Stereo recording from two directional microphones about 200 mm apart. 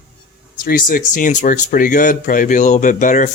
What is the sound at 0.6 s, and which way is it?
Speech, 45° left (ahead or behind).